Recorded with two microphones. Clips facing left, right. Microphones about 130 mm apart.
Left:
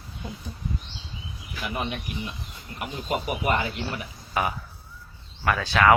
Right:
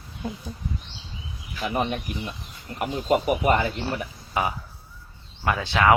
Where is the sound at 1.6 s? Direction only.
35° right (ahead or behind).